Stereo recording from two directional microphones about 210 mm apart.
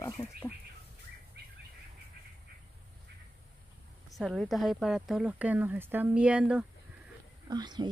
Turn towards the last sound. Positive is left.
turn(degrees=-20)  # may be behind; listen again after turning